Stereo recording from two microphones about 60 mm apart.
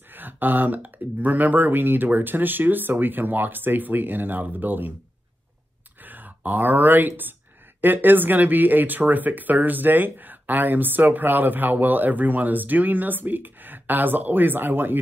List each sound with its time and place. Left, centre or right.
0.1 s speech: right
6.0 s speech: right